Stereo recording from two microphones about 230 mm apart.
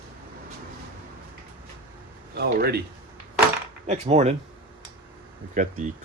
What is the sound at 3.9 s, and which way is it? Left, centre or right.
Speech, right.